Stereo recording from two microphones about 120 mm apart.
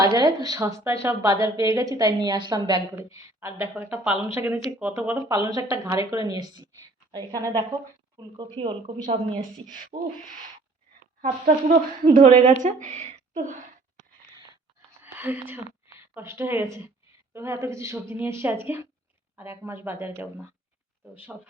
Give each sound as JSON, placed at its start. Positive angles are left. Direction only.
{"t": 0.0, "sound": "a woman's voice", "side_deg": -30}
{"t": 5.1, "sound": "a woman's voice", "side_deg": -30}
{"t": 9.9, "sound": "owl", "side_deg": -70}
{"t": 11.2, "sound": "speech", "side_deg": -70}
{"t": 15.0, "sound": "a woman's voice", "side_deg": -15}